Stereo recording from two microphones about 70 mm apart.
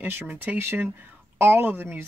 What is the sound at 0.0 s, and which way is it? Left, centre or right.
Speech, right.